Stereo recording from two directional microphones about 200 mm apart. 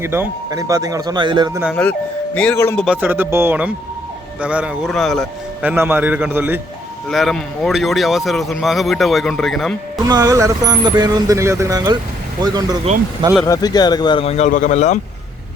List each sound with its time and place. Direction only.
0.0 s speech: 10° right (ahead or behind)
1.7 s a man's voice: 10° left (ahead or behind)
5.6 s speech: 10° right (ahead or behind)
7.1 s a man's voice: centre (ahead or behind)
10.0 s speech: 20° right (ahead or behind)
13.4 s a man's voice: 20° left (ahead or behind); by 14.9 s 35° left (ahead or behind)